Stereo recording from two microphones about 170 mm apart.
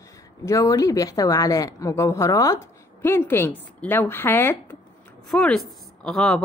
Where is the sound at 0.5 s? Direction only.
20° left (ahead or behind).